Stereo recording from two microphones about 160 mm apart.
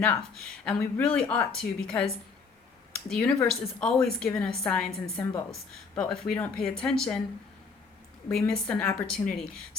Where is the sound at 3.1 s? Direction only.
5° left (ahead or behind).